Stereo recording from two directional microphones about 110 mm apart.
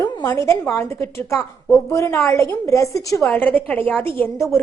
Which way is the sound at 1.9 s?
25° left (ahead or behind).